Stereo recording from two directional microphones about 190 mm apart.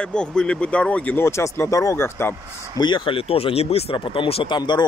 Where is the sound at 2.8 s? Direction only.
25° left (ahead or behind).